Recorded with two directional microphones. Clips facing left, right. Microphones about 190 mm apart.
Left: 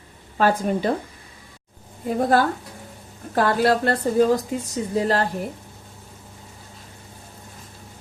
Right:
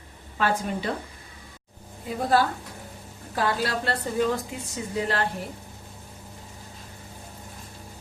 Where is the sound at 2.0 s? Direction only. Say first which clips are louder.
Left 4 dB; 50° left (ahead or behind).